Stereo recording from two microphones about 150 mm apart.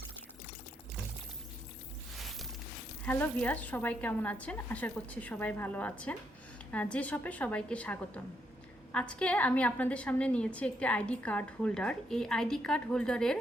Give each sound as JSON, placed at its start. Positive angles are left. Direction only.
{"t": 3.1, "sound": "a woman's voice", "side_deg": 10}